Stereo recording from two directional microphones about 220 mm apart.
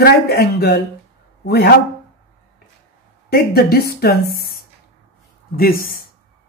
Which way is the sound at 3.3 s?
45° left (ahead or behind).